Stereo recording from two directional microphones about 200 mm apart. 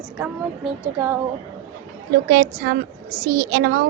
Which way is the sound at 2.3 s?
45° right (ahead or behind).